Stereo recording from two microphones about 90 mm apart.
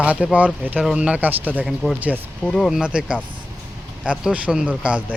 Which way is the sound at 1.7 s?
Centre (ahead or behind).